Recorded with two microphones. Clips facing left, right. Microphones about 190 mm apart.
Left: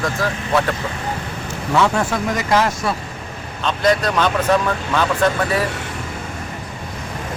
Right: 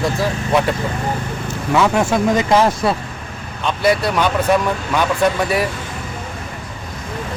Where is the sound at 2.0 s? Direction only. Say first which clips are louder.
Right 5 dB; 25° right (ahead or behind).